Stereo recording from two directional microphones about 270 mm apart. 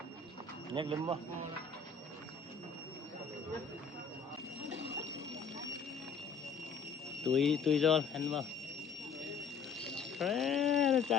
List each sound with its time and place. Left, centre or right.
0.7 s speech: centre
4.7 s a sound: right
7.3 s speech: centre
9.9 s alarm: centre